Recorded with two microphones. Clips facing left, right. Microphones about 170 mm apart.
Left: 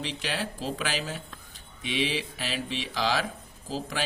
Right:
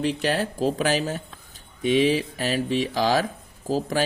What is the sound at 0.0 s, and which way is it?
Speech, 45° right (ahead or behind).